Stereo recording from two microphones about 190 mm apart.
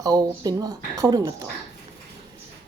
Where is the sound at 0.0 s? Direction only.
20° right (ahead or behind).